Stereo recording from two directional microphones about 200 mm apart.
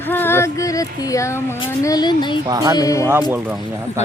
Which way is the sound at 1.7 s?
20° left (ahead or behind).